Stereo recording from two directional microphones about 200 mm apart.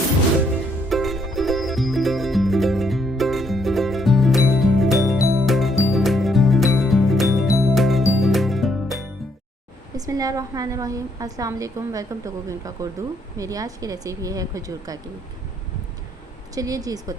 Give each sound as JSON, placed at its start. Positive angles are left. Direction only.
{"t": 0.9, "sound": "music", "side_deg": 0}
{"t": 10.1, "sound": "a woman's voice", "side_deg": -15}
{"t": 16.6, "sound": "a woman's voice", "side_deg": -15}